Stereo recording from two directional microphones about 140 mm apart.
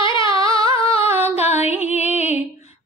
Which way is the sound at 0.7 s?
40° left (ahead or behind).